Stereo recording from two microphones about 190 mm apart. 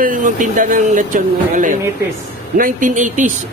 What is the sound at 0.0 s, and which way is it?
Speech, 45° right (ahead or behind).